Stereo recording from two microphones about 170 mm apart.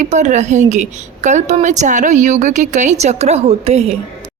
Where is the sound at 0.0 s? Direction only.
45° right (ahead or behind).